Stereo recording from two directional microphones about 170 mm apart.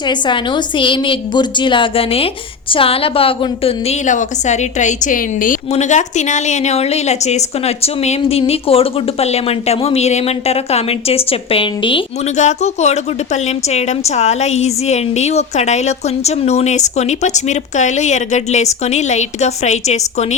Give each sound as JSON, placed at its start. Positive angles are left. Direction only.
{"t": 0.1, "sound": "a woman's voice", "side_deg": 25}
{"t": 4.0, "sound": "a woman's voice", "side_deg": 45}
{"t": 12.4, "sound": "a woman's voice", "side_deg": 40}